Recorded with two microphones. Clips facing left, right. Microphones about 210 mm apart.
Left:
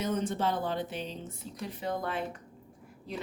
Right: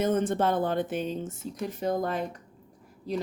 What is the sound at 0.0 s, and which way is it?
A woman's voice, 50° right (ahead or behind).